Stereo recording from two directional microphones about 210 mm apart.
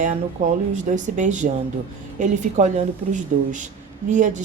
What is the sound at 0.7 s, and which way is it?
Speech, 35° right (ahead or behind).